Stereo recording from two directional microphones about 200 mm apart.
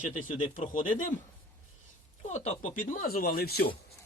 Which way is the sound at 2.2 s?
35° left (ahead or behind).